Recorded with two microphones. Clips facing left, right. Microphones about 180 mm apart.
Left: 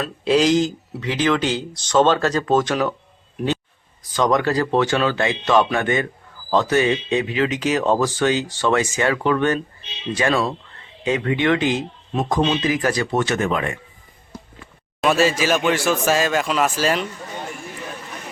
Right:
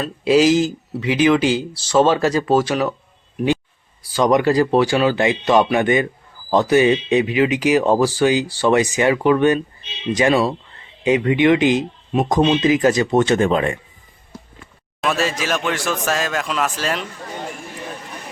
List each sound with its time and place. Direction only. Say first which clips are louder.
0.0 s speech: right 3 dB; 5° right (ahead or behind)
4.0 s speech: right 3 dB; 10° right (ahead or behind); by 13.7 s 30° right (ahead or behind)
15.0 s speech: left 3 dB; centre (ahead or behind)